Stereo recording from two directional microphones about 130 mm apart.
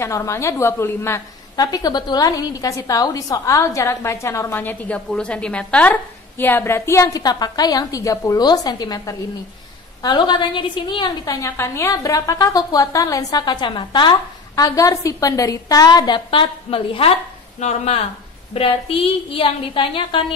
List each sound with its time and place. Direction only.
0.0 s a woman's voice: 25° left (ahead or behind); by 17.1 s 45° left (ahead or behind)
17.6 s speech: 55° left (ahead or behind)
18.5 s a woman's voice: 45° left (ahead or behind)